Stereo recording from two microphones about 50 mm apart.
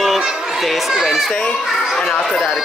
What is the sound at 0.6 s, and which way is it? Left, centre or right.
Crowd, centre.